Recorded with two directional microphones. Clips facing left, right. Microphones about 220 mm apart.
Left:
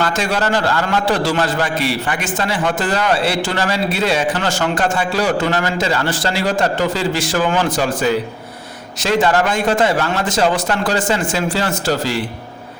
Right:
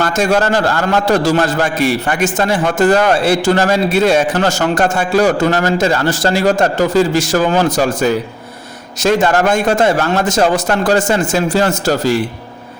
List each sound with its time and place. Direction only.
0.0 s a man's voice: 45° right (ahead or behind)